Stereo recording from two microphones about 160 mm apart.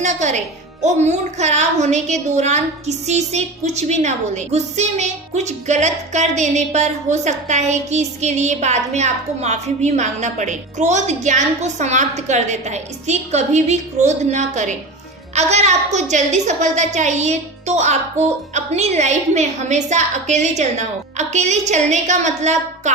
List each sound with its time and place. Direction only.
0.0 s speech: 50° right (ahead or behind)